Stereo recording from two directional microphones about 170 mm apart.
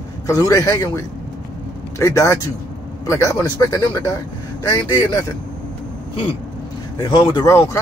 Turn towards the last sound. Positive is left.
turn(degrees=15)  # may be behind; listen again after turning